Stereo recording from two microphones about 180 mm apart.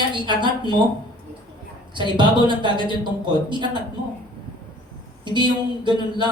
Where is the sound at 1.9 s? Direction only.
25° right (ahead or behind).